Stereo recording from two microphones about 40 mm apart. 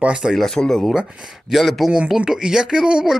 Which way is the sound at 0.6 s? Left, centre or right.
Left.